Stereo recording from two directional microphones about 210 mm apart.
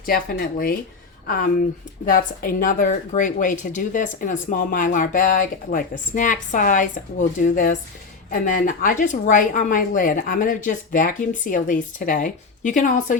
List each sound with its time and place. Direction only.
0.0 s speech: 45° left (ahead or behind)
2.0 s a woman's voice: 40° left (ahead or behind)